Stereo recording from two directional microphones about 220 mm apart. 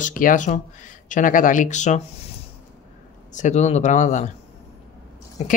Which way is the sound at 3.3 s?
30° left (ahead or behind).